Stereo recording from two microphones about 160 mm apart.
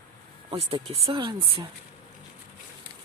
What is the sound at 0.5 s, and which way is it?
Speech, 40° right (ahead or behind).